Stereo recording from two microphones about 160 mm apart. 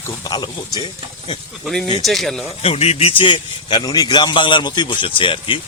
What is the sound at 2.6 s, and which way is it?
A man's voice, 40° left (ahead or behind).